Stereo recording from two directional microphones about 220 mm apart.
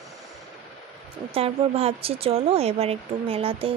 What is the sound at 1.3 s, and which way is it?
Speech, 25° right (ahead or behind).